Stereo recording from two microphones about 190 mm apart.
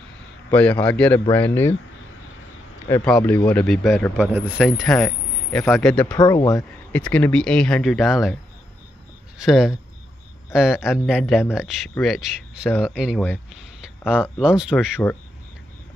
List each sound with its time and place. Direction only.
0.5 s a man's voice: 5° left (ahead or behind)
3.1 s a man's voice: 5° left (ahead or behind)
6.1 s speech: 20° left (ahead or behind)
6.9 s a man's voice: 5° left (ahead or behind)
9.4 s a man's voice: 5° right (ahead or behind)
13.8 s a sound: 5° right (ahead or behind)
14.4 s a man's voice: 5° right (ahead or behind)